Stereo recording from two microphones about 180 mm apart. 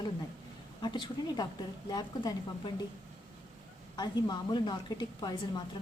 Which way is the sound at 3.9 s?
25° left (ahead or behind).